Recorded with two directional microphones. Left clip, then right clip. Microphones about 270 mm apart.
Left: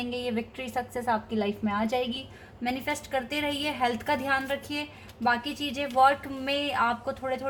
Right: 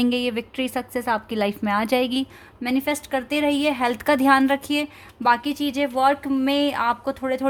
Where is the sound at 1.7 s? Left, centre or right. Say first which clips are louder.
Right 8 dB; right.